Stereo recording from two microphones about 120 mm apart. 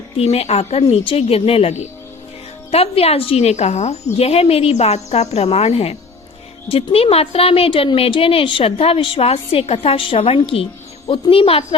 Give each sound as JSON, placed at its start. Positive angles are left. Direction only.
{"t": 0.2, "sound": "speech", "side_deg": 60}